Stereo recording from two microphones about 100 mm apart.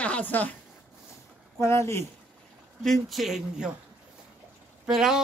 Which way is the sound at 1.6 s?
30° left (ahead or behind).